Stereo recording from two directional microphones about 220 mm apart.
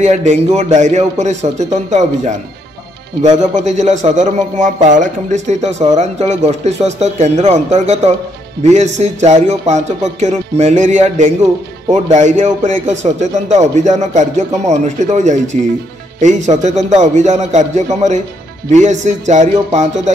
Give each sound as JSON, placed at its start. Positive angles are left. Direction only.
{"t": 0.0, "sound": "speech", "side_deg": -30}